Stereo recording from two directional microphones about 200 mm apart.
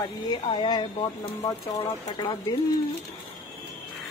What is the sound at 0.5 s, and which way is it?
Speech, 20° left (ahead or behind).